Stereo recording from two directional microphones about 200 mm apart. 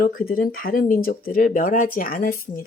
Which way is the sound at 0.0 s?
45° left (ahead or behind).